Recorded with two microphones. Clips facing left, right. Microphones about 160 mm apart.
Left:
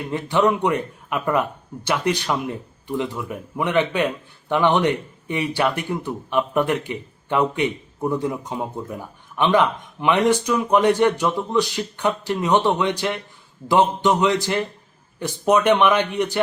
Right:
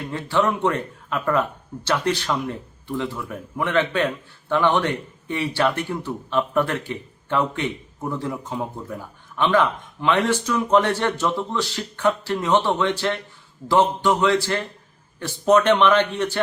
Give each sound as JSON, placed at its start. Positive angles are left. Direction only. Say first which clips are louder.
{"t": 0.1, "sound": "speech", "louder": "left 3 dB", "side_deg": 15}